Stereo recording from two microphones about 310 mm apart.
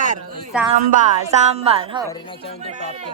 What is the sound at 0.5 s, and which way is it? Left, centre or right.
Speech, centre.